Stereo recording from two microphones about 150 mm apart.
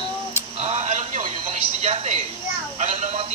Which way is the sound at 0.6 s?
45° right (ahead or behind).